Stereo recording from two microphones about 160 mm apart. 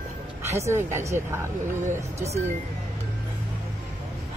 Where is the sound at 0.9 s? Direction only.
15° right (ahead or behind).